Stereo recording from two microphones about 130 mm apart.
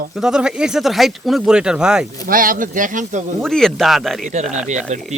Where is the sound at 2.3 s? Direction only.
90° right.